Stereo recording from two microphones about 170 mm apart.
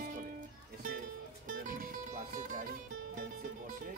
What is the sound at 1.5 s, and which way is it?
Music, 55° right (ahead or behind).